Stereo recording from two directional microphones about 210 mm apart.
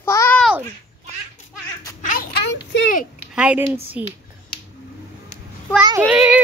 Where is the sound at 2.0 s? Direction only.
45° left (ahead or behind).